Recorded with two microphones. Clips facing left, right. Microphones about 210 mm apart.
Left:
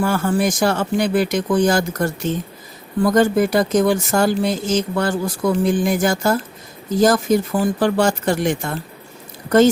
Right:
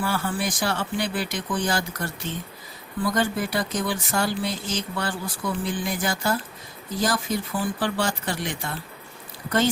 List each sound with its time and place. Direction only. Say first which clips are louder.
0.0 s speech: left 8 dB; 45° left (ahead or behind)